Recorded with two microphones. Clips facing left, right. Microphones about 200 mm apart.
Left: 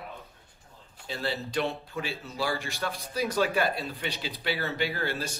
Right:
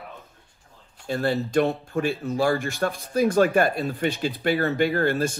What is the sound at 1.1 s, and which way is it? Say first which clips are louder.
Speech: right 9 dB; 50° right (ahead or behind).